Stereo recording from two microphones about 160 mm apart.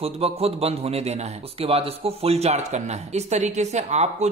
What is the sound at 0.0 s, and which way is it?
A man's voice, 40° right (ahead or behind).